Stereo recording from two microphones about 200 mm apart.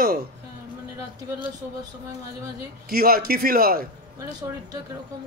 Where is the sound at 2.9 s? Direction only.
50° right (ahead or behind).